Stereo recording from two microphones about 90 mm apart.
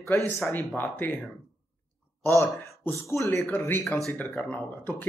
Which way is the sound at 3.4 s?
20° left (ahead or behind).